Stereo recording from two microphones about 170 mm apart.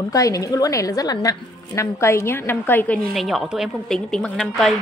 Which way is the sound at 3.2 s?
Centre (ahead or behind).